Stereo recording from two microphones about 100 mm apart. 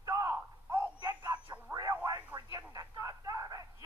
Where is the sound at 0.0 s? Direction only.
30° right (ahead or behind).